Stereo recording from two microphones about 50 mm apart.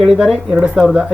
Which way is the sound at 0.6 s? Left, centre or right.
Right.